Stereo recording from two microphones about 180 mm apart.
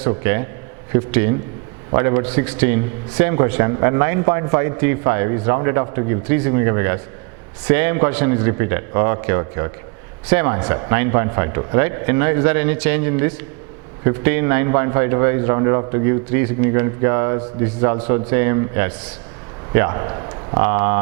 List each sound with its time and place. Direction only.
0.2 s a man's voice: 15° right (ahead or behind)
20.7 s a man's voice: 15° right (ahead or behind)